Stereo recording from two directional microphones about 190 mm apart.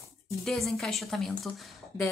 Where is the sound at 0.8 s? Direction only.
Centre (ahead or behind).